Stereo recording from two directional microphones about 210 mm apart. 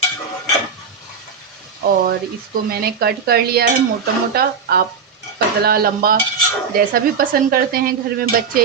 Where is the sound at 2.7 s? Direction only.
45° right (ahead or behind).